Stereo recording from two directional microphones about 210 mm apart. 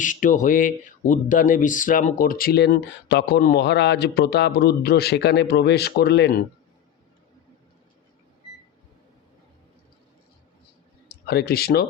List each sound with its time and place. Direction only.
0.0 s speech: 40° left (ahead or behind)
11.1 s speech: 50° left (ahead or behind)